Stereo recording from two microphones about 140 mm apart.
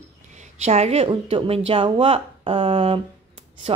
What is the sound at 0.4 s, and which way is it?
A woman's voice, 50° right (ahead or behind).